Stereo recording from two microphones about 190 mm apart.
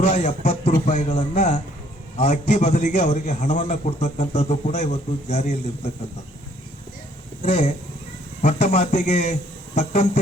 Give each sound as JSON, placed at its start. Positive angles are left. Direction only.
{"t": 0.0, "sound": "a man's voice", "side_deg": 35}
{"t": 7.4, "sound": "a man's voice", "side_deg": 40}